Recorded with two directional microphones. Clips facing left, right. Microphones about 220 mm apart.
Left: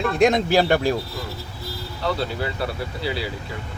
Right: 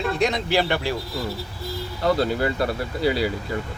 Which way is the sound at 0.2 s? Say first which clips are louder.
Left 6 dB; 50° left (ahead or behind).